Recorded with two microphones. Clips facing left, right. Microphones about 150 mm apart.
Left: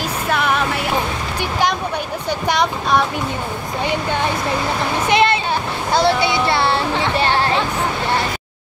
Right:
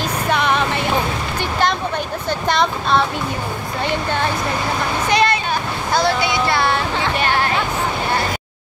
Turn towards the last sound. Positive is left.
turn(degrees=30)  # may be behind; listen again after turning